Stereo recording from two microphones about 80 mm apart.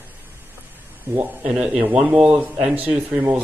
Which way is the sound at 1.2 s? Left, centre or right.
Centre.